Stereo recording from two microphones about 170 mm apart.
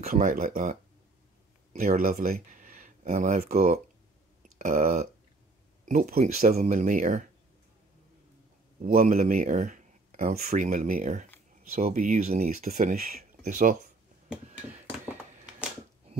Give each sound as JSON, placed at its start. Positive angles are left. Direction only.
{"t": 0.0, "sound": "speech", "side_deg": -50}
{"t": 8.8, "sound": "speech", "side_deg": -50}